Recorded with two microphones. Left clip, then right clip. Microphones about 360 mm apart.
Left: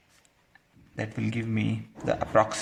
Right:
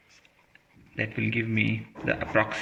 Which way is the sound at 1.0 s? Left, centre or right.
Left.